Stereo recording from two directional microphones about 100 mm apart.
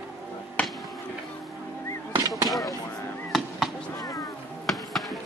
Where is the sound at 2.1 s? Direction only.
35° right (ahead or behind).